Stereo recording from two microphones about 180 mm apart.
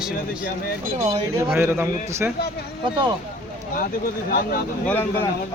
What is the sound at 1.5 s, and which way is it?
Speech, 15° right (ahead or behind).